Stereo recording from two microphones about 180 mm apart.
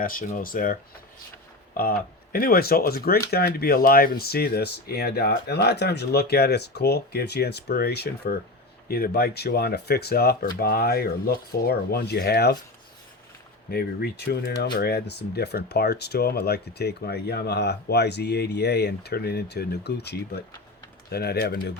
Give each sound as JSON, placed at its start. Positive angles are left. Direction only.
{"t": 0.0, "sound": "speech", "side_deg": 50}
{"t": 13.7, "sound": "speech", "side_deg": 60}